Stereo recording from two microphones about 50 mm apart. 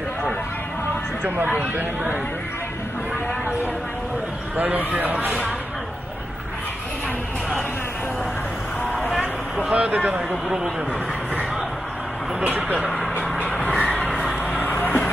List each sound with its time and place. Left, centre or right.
1.6 s speech: right
4.6 s speech: right
9.6 s speech: right
12.4 s speech: right
13.5 s a sound: centre
14.6 s music: left